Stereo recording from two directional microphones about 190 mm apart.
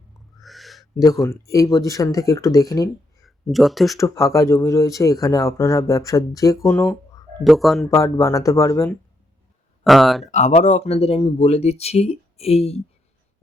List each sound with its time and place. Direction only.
0.4 s owl: centre (ahead or behind)
1.0 s speech: 15° left (ahead or behind)
3.2 s speech: centre (ahead or behind)
3.9 s speech: 15° left (ahead or behind)
7.4 s speech: centre (ahead or behind)
7.9 s speech: 15° left (ahead or behind)
9.8 s speech: centre (ahead or behind)
10.3 s speech: 40° left (ahead or behind)